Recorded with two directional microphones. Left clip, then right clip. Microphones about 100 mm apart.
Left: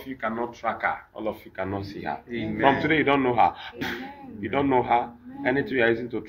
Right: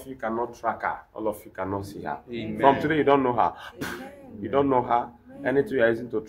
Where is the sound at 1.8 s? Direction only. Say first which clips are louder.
Left 1 dB; 45° right (ahead or behind).